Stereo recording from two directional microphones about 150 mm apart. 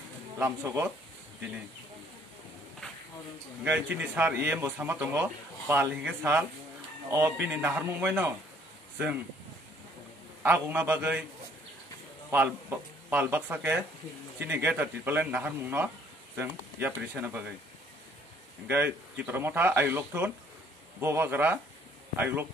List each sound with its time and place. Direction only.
0.4 s speech: 15° right (ahead or behind)
3.6 s speech: 10° right (ahead or behind)
10.4 s speech: 10° right (ahead or behind)
12.3 s speech: 15° right (ahead or behind)
19.1 s speech: 15° right (ahead or behind)